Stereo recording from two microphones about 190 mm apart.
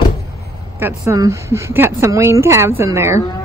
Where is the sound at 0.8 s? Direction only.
15° right (ahead or behind).